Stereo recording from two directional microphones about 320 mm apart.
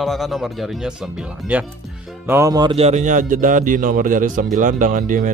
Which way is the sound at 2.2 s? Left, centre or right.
Centre.